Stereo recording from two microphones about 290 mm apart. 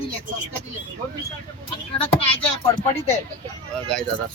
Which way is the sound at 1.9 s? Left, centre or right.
Centre.